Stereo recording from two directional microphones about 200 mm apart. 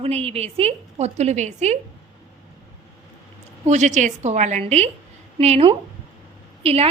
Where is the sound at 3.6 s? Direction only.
35° right (ahead or behind).